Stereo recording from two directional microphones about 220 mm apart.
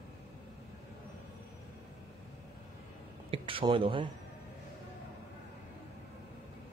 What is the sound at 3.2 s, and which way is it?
Speech, 25° right (ahead or behind).